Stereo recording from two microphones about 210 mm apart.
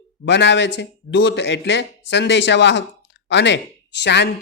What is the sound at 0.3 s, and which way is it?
Speech, 60° left (ahead or behind).